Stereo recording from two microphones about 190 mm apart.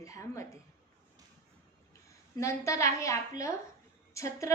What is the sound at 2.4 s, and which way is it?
A woman's voice, 15° left (ahead or behind).